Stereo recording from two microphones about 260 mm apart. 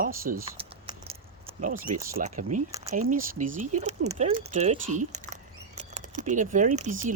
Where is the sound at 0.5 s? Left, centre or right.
Right.